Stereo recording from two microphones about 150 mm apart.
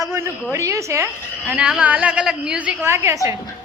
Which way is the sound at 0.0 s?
20° right (ahead or behind).